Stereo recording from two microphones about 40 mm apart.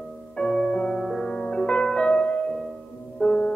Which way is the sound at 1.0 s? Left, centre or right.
Centre.